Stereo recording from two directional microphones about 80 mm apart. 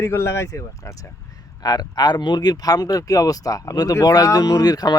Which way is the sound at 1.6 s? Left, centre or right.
Left.